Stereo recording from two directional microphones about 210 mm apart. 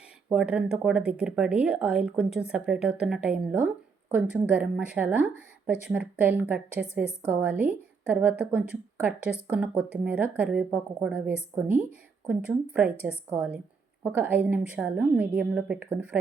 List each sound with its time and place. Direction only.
0.3 s speech: 5° right (ahead or behind)